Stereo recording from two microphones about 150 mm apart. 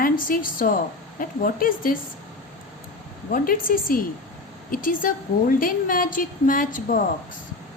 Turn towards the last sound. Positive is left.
turn(degrees=65)  # may be behind; listen again after turning